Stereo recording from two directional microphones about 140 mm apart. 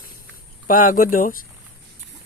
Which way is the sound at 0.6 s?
75° left (ahead or behind).